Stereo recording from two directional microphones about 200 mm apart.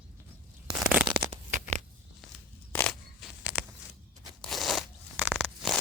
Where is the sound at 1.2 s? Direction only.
35° right (ahead or behind).